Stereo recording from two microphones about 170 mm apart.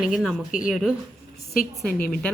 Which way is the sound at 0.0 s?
5° right (ahead or behind).